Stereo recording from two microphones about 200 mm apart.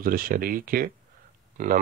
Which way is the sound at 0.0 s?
45° right (ahead or behind).